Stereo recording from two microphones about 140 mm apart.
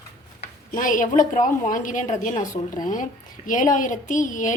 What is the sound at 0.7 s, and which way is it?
A woman's voice, 70° left (ahead or behind).